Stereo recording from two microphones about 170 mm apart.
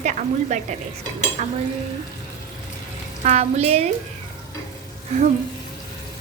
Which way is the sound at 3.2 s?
40° right (ahead or behind).